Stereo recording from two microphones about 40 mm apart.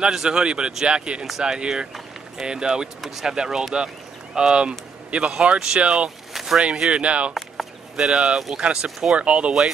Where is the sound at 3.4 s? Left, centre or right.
Centre.